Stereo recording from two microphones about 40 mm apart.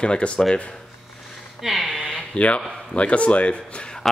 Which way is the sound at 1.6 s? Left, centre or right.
Centre.